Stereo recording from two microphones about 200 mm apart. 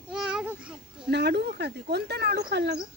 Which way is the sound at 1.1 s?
55° right (ahead or behind).